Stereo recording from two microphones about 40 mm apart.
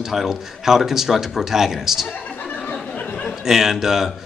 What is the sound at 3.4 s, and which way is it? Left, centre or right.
Speech, centre.